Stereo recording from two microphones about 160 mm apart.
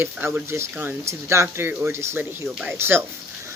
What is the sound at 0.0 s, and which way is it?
Speech, 10° right (ahead or behind).